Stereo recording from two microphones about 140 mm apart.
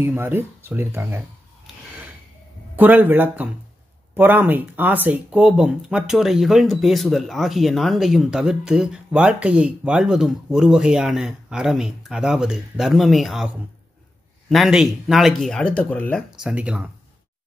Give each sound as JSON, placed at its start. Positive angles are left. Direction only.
{"t": 0.0, "sound": "speech", "side_deg": -15}
{"t": 2.7, "sound": "speech", "side_deg": -15}
{"t": 14.5, "sound": "speech", "side_deg": 0}
{"t": 16.3, "sound": "speech", "side_deg": -10}